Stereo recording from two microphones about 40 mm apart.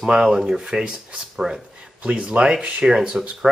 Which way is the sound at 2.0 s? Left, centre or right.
Right.